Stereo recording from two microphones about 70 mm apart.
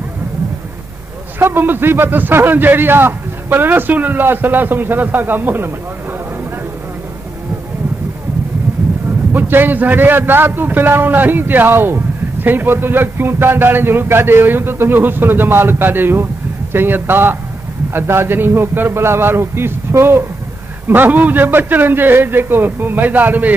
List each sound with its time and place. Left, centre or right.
1.4 s a man's voice: right
9.3 s a man's voice: right